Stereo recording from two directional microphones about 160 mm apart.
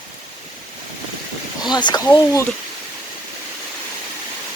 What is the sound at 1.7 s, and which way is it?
Speech, 25° left (ahead or behind).